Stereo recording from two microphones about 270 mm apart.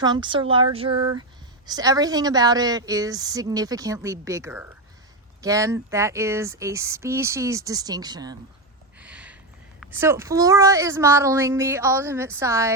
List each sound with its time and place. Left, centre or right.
0.0 s speech: centre
9.0 s a sound: centre
9.8 s speech: centre